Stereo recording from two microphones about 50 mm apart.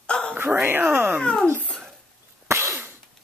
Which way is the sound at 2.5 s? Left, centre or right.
Right.